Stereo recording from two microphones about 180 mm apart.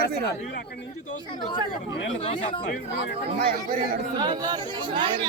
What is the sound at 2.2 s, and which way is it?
Speech, 40° left (ahead or behind).